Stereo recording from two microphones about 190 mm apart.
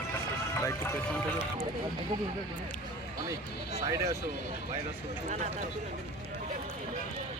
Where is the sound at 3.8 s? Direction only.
20° right (ahead or behind).